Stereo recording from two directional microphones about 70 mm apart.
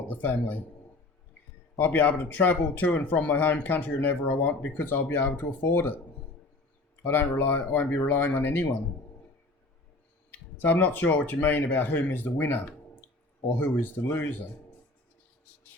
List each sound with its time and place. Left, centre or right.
0.1 s speech: left
1.8 s speech: left
7.0 s speech: left
10.3 s speech: left